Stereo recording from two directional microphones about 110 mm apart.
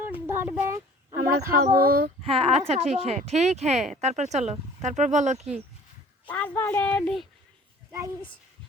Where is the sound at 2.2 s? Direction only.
60° right (ahead or behind); by 5.4 s 90° right.